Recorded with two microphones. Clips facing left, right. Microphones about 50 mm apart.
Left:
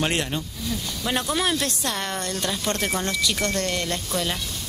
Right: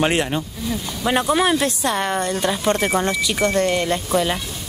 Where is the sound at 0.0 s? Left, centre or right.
Centre.